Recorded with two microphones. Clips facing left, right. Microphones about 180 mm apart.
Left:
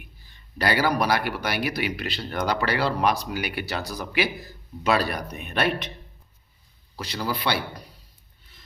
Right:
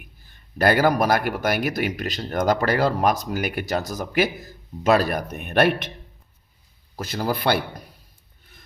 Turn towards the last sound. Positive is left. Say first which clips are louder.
# right 5 dB
turn(degrees=-50)  # may be behind; listen again after turning